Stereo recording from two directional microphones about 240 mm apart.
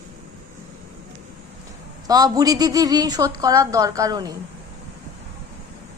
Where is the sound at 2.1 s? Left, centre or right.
Centre.